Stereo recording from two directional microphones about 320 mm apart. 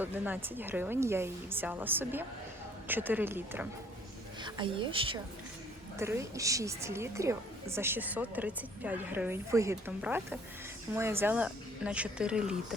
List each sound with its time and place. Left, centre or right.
0.0 s a woman's voice: centre